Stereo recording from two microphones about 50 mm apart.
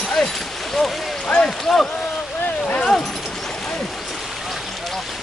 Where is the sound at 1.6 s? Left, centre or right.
Centre.